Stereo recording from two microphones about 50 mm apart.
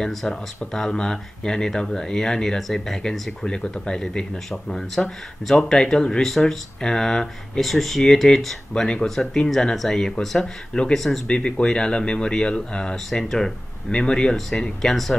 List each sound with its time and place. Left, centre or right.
0.1 s speech: centre
11.2 s speech: centre
12.9 s speech: centre